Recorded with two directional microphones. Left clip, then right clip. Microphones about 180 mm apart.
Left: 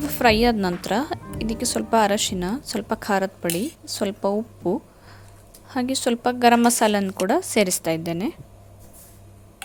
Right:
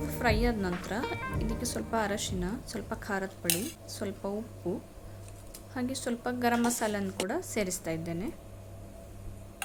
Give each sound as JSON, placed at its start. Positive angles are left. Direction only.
{"t": 0.0, "sound": "a woman's voice", "side_deg": 40}
{"t": 5.7, "sound": "a woman's voice", "side_deg": 35}